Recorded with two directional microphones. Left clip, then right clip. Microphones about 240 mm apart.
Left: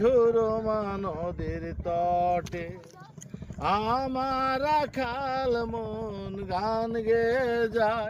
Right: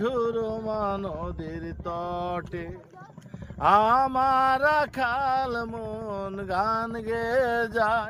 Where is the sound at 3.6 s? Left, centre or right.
Centre.